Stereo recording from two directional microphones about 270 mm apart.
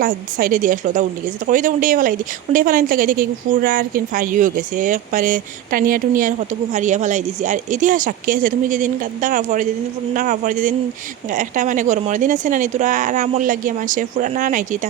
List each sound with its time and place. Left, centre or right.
0.0 s a woman's voice: right